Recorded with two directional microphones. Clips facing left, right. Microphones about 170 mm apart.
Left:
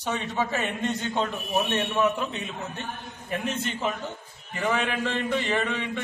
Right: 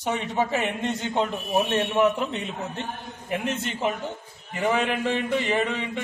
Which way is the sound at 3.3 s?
15° right (ahead or behind).